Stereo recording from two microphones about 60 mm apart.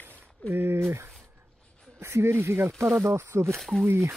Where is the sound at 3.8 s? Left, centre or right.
Right.